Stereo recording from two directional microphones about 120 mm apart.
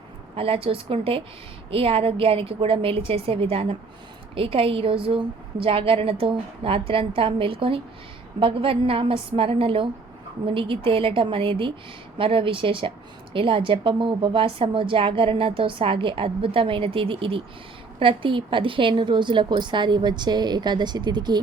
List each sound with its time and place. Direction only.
0.3 s a woman's voice: 50° right (ahead or behind)